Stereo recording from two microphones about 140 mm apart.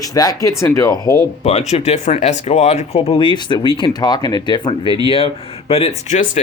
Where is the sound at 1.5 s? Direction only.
50° left (ahead or behind).